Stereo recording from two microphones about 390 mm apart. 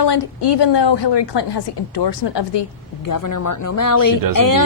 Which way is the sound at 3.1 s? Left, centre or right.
Left.